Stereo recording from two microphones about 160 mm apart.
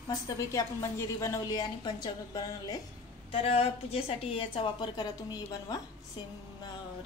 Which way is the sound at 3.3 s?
35° left (ahead or behind).